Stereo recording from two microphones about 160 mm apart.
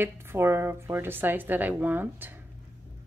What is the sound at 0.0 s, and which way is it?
A woman's voice, 15° right (ahead or behind).